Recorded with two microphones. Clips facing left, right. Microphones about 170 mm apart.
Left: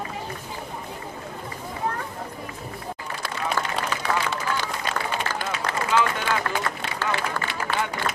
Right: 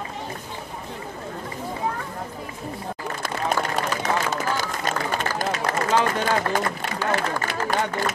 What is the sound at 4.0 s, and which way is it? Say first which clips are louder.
Run: right 2 dB; 45° right (ahead or behind).